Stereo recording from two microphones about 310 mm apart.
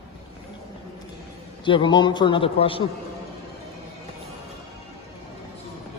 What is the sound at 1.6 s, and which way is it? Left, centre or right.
A man's voice, centre.